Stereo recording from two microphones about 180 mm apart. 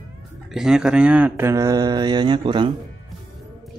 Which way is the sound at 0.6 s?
5° right (ahead or behind).